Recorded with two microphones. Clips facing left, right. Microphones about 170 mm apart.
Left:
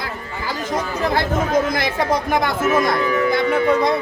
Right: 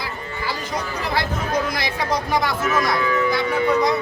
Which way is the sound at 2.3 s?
50° left (ahead or behind).